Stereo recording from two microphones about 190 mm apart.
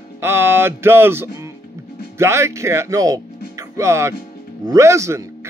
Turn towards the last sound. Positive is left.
turn(degrees=-15)  # may be behind; listen again after turning